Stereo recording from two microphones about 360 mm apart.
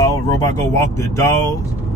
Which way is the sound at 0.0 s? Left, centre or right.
Centre.